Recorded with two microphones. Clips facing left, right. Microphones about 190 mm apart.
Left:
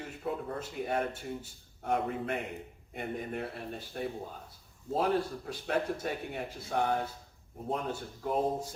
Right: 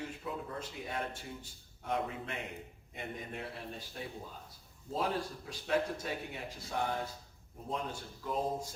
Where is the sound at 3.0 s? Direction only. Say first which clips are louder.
Left 6 dB; 50° left (ahead or behind).